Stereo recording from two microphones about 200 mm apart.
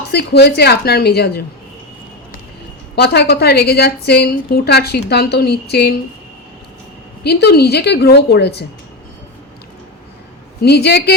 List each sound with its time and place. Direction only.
0.1 s a woman's voice: 55° left (ahead or behind)
2.9 s a woman's voice: 55° left (ahead or behind)
7.3 s a woman's voice: 55° left (ahead or behind)
10.6 s a woman's voice: 55° left (ahead or behind)